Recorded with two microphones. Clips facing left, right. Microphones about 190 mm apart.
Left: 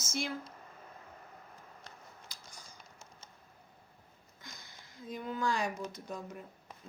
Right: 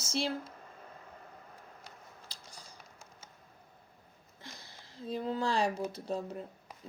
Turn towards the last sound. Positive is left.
turn(degrees=-30)  # may be behind; listen again after turning